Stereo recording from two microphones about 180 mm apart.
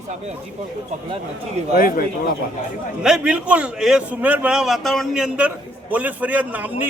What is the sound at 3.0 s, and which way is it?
A man's voice, 5° right (ahead or behind).